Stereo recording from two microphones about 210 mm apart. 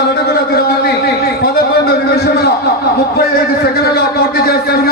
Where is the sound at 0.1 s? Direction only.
45° left (ahead or behind).